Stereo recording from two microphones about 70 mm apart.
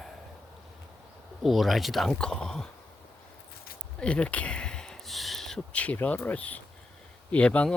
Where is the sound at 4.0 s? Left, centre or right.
Centre.